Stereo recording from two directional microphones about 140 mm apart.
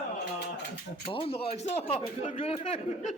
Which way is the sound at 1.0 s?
40° left (ahead or behind).